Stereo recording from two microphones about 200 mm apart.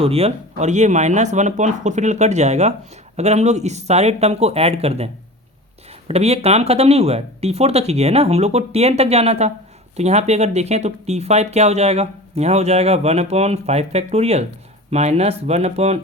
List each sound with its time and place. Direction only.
0.0 s speech: 30° right (ahead or behind)
6.1 s speech: 30° right (ahead or behind)